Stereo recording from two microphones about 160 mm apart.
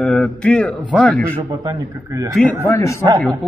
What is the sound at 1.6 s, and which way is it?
Speech, 20° right (ahead or behind).